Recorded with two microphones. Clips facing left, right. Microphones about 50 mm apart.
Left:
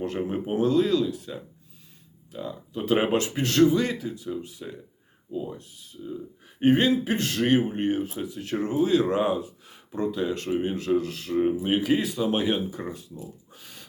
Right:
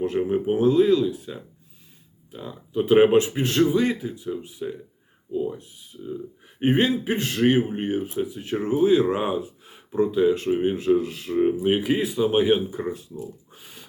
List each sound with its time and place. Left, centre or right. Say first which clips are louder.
0.0 s speech: right 5 dB; centre
0.4 s speech: right 4 dB; centre
13.5 s a sound: right 1 dB; centre